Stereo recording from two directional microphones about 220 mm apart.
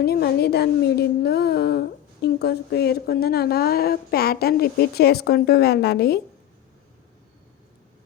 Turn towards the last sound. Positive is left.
turn(degrees=45)  # may be behind; listen again after turning